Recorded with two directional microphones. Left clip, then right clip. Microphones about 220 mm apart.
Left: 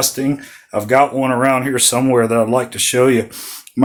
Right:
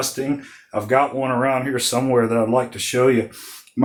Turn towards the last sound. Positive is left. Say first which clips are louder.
# left 4 dB
turn(degrees=40)  # may be behind; listen again after turning